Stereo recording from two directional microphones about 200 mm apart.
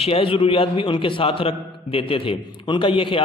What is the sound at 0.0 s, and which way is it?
A man's voice, 30° left (ahead or behind).